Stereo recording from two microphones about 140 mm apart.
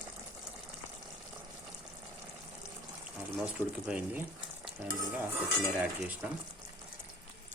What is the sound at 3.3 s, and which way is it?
Speech, 10° right (ahead or behind).